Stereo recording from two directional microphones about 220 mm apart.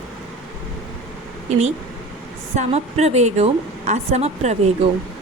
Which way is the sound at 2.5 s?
30° right (ahead or behind).